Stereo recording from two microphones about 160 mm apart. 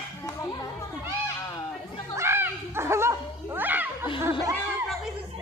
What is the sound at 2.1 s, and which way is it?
Bow-wow, 15° right (ahead or behind).